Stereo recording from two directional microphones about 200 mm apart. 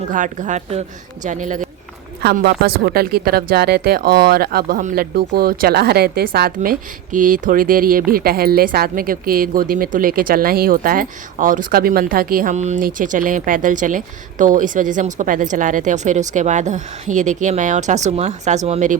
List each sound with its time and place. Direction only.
0.1 s speech: 40° right (ahead or behind)
2.2 s a woman's voice: 50° right (ahead or behind)